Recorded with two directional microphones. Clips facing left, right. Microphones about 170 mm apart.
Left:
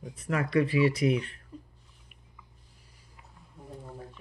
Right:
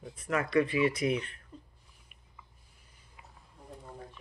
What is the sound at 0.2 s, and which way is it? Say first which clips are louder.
Speech: left 1 dB; 35° left (ahead or behind).